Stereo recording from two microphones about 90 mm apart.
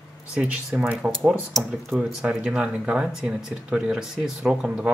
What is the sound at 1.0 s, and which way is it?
Speech, 5° right (ahead or behind).